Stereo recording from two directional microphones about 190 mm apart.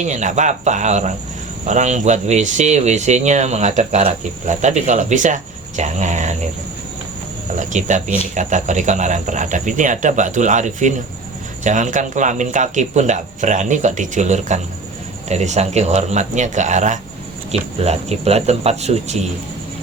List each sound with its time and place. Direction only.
0.0 s speech: 40° right (ahead or behind)
7.5 s speech: 40° right (ahead or behind)